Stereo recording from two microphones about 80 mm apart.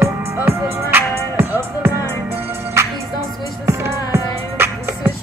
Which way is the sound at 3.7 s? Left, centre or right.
Right.